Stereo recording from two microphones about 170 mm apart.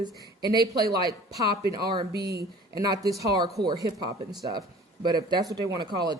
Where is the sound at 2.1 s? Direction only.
70° right (ahead or behind).